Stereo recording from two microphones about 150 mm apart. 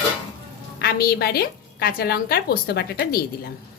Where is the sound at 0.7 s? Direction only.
85° left.